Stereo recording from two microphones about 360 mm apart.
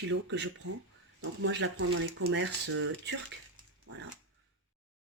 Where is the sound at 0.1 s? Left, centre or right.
Right.